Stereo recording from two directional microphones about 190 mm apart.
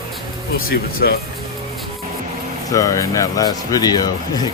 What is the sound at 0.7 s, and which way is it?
Speech, 55° left (ahead or behind).